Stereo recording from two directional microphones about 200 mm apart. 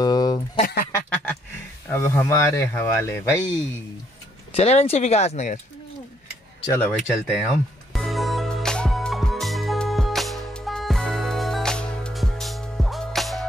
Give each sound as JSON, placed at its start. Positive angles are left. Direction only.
{"t": 0.0, "sound": "a sound", "side_deg": 20}
{"t": 0.6, "sound": "quack", "side_deg": 45}
{"t": 1.9, "sound": "speech", "side_deg": 10}
{"t": 4.6, "sound": "speech", "side_deg": 30}
{"t": 6.7, "sound": "speech", "side_deg": 5}
{"t": 7.9, "sound": "music", "side_deg": 0}